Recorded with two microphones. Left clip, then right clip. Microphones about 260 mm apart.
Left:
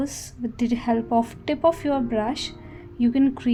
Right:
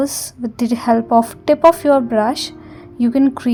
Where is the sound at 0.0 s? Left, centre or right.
Right.